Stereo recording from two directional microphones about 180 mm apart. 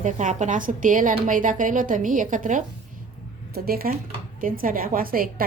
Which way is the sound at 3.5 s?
55° right (ahead or behind).